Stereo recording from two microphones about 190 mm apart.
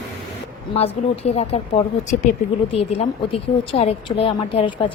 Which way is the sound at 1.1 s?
35° left (ahead or behind).